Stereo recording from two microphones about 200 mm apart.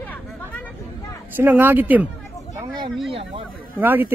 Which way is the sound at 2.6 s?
20° right (ahead or behind).